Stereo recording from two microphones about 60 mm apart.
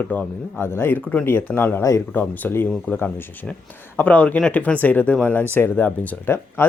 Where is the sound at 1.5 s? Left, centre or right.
Centre.